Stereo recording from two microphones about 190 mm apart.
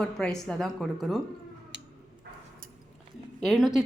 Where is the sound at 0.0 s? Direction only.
Centre (ahead or behind).